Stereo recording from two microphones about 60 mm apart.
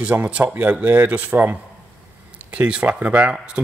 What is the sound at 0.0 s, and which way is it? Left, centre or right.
A man's voice, right.